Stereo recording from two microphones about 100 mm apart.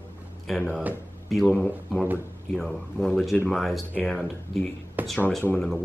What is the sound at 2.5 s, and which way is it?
Speech, 5° left (ahead or behind).